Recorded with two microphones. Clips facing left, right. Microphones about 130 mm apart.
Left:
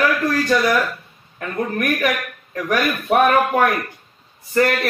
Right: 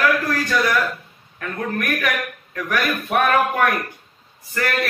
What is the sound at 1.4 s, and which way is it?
A man's voice, 25° left (ahead or behind).